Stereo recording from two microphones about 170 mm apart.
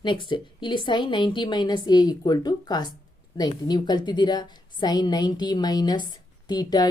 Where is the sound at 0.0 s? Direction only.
30° left (ahead or behind).